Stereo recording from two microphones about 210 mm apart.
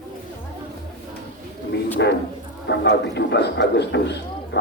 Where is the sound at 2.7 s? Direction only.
55° left (ahead or behind).